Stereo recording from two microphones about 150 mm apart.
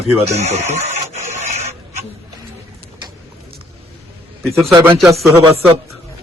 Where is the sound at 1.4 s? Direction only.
45° right (ahead or behind).